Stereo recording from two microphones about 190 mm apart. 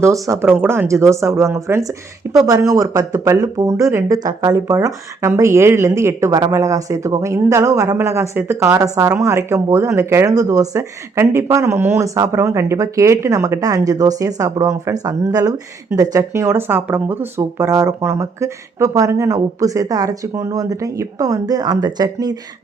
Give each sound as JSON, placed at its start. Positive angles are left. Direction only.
{"t": 0.0, "sound": "speech", "side_deg": -15}